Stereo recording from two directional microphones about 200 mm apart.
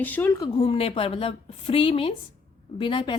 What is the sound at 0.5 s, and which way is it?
A woman's voice, 30° left (ahead or behind).